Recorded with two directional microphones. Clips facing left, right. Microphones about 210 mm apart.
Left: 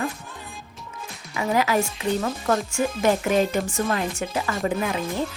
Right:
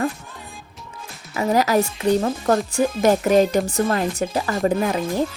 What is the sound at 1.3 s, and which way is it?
Speech, 40° right (ahead or behind).